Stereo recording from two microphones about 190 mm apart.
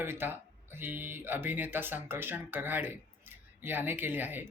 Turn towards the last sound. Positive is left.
turn(degrees=-10)  # may be behind; listen again after turning